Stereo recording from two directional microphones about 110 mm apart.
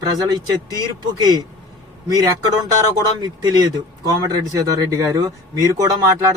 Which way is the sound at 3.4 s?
35° right (ahead or behind).